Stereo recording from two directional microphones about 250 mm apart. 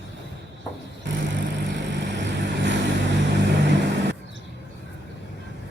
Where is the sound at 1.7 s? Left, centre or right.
Right.